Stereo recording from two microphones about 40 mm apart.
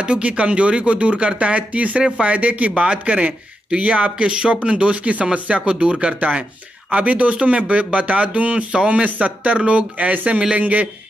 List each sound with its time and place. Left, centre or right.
0.0 s speech: right
6.1 s speech: right